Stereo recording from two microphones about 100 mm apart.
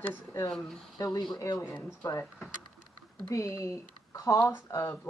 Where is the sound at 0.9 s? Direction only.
40° left (ahead or behind).